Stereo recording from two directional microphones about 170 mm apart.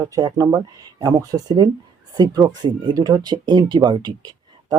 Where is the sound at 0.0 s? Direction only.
20° right (ahead or behind).